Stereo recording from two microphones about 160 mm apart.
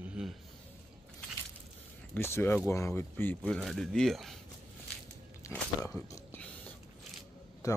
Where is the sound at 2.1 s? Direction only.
15° left (ahead or behind).